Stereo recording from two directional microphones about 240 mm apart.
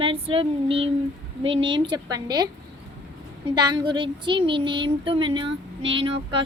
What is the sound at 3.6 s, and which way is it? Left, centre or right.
Child singing, centre.